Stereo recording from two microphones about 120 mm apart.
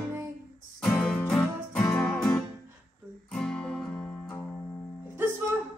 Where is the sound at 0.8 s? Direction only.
5° left (ahead or behind).